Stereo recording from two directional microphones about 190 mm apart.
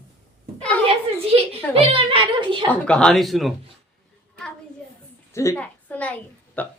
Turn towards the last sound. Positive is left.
turn(degrees=10)  # may be behind; listen again after turning